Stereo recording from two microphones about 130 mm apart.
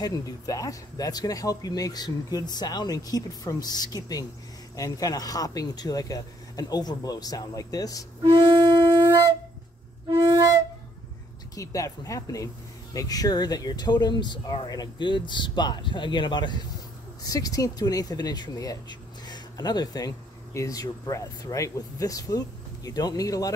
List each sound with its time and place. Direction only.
0.0 s speech: 25° left (ahead or behind)
8.2 s wind instrument: 35° right (ahead or behind)
10.0 s flute: 30° right (ahead or behind)
11.5 s speech: 25° left (ahead or behind)
19.2 s a sound: 30° left (ahead or behind)
20.5 s speech: 25° left (ahead or behind)